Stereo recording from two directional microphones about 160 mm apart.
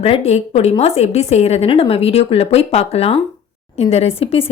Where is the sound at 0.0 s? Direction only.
40° left (ahead or behind).